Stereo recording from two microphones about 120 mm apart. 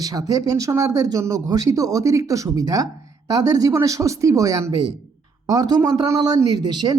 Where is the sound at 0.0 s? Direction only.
30° right (ahead or behind).